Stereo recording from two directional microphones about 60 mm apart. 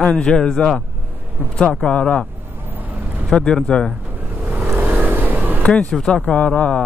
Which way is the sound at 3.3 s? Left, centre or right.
Centre.